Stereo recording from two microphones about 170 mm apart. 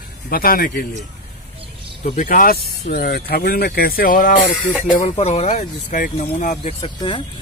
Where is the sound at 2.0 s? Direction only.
50° left (ahead or behind).